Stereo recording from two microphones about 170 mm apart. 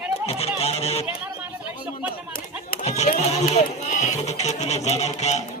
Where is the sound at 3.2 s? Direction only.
40° left (ahead or behind).